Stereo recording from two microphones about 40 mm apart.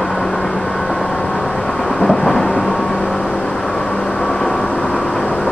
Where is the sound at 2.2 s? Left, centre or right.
Centre.